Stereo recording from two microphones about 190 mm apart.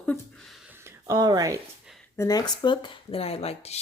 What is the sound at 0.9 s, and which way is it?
Speech, 15° right (ahead or behind).